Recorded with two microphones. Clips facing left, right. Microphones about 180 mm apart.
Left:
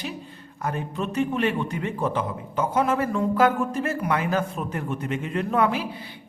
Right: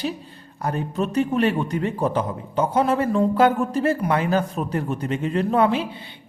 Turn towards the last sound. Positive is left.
turn(degrees=-25)  # may be behind; listen again after turning